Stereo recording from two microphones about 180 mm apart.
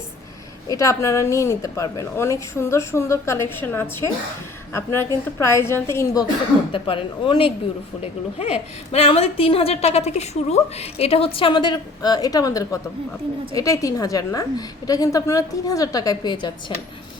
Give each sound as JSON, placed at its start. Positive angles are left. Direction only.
{"t": 0.7, "sound": "a woman's voice", "side_deg": 15}
{"t": 6.7, "sound": "a woman's voice", "side_deg": 30}